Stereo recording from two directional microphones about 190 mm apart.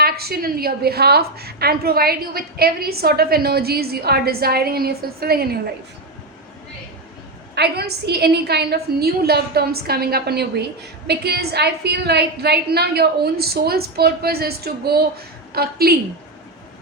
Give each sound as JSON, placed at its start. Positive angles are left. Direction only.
{"t": 0.0, "sound": "a woman's voice", "side_deg": -55}
{"t": 7.5, "sound": "a woman's voice", "side_deg": -60}